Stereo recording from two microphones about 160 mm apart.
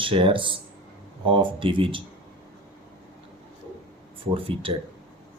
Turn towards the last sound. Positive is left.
turn(degrees=-35)  # may be behind; listen again after turning